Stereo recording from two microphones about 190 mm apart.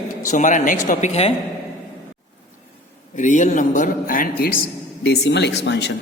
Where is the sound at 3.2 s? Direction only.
40° left (ahead or behind).